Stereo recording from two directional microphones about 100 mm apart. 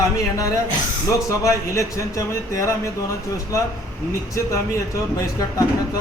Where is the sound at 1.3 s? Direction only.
30° left (ahead or behind).